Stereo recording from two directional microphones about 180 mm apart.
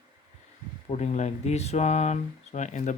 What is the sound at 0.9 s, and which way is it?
Speech, 40° left (ahead or behind).